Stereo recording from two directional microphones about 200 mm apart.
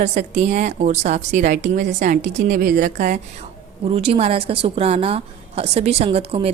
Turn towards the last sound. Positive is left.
turn(degrees=-30)  # may be behind; listen again after turning